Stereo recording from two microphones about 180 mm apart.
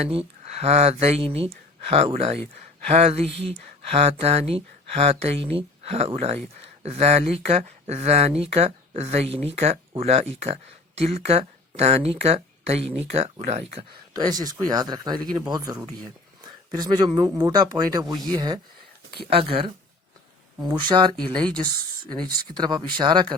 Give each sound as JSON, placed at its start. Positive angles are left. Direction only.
{"t": 0.0, "sound": "speech", "side_deg": -35}
{"t": 22.1, "sound": "speech", "side_deg": -25}